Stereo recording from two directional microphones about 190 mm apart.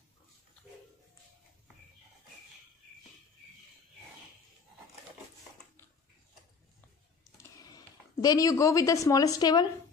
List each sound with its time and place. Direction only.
7.7 s a woman's voice: 20° left (ahead or behind)